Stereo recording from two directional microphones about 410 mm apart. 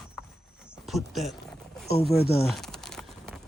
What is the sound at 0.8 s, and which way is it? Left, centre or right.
Speech, centre.